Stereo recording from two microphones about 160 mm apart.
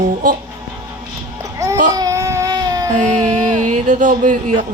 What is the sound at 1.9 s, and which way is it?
Baby cry, 20° right (ahead or behind).